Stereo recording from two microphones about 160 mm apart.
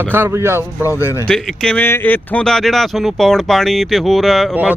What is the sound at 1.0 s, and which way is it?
Speech, 20° left (ahead or behind).